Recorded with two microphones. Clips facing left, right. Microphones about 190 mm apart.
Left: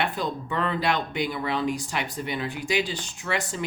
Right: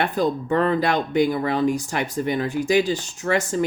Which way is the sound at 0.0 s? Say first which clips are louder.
Right 6 dB; 45° right (ahead or behind).